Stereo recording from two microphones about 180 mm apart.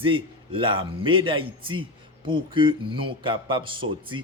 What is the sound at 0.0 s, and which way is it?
A man's voice, 30° right (ahead or behind).